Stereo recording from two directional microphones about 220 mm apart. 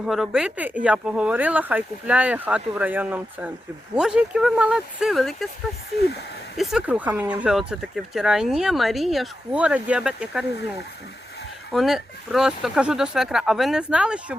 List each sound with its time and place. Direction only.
0.0 s speech: centre (ahead or behind)
6.0 s speech: 45° left (ahead or behind)
6.6 s speech: centre (ahead or behind)
11.7 s speech: centre (ahead or behind)